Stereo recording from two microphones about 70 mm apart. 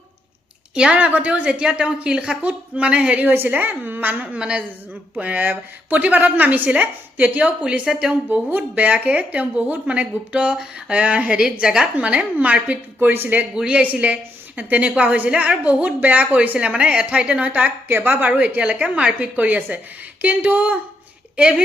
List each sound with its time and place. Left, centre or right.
0.7 s speech: centre
3.2 s speech: right
4.4 s speech: centre
5.2 s speech: right
13.5 s speech: centre; by 18.3 s right
18.3 s speech: centre